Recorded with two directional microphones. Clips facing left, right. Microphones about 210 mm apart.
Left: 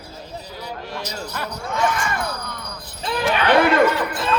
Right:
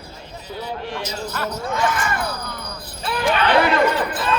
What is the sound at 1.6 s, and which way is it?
Speech, centre (ahead or behind).